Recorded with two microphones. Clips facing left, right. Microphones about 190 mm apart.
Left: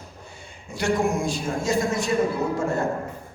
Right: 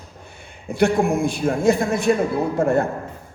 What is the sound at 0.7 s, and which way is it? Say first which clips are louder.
A man's voice: right 5 dB; 60° right (ahead or behind).